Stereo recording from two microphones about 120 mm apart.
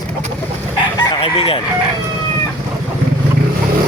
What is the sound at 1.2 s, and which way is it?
Speech, 50° left (ahead or behind).